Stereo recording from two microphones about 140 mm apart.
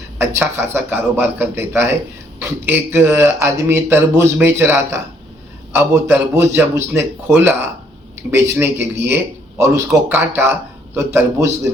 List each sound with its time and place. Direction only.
0.2 s speech: 20° right (ahead or behind)